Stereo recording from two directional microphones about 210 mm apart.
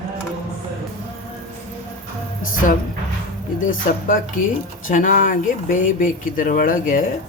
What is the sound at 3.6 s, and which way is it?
Speech, 40° left (ahead or behind).